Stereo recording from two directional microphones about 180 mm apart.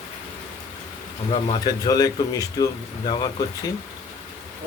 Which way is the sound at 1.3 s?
25° left (ahead or behind).